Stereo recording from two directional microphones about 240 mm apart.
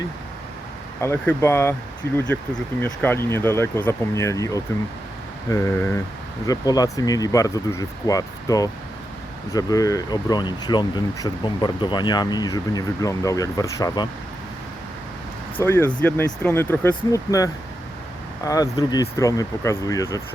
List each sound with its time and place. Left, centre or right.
1.0 s speech: centre
15.5 s speech: centre